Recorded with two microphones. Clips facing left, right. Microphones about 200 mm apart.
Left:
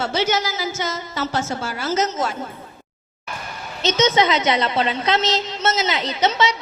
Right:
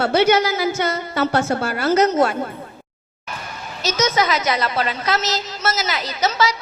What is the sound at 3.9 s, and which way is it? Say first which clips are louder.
A woman's voice: left 2 dB; 25° left (ahead or behind).